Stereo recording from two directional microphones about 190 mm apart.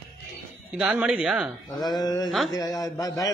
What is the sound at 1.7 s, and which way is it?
A man's voice, 20° left (ahead or behind).